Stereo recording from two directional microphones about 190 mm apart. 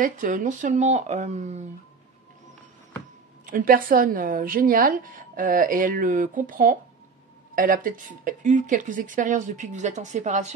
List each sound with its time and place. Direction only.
0.0 s speech: 45° right (ahead or behind)
3.4 s a woman's voice: 45° right (ahead or behind)